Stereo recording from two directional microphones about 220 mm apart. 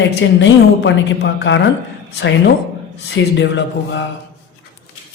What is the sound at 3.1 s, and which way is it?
Speech, 55° left (ahead or behind).